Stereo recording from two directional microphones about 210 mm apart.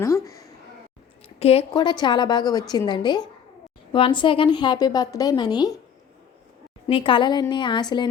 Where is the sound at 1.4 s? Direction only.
30° left (ahead or behind).